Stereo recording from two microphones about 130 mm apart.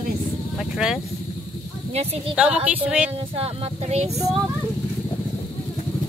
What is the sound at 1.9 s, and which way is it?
Speech, 50° right (ahead or behind).